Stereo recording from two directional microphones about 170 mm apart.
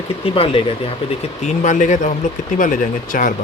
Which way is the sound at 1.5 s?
45° left (ahead or behind).